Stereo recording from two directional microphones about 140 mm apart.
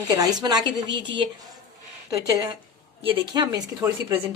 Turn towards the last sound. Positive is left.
turn(degrees=-30)  # may be behind; listen again after turning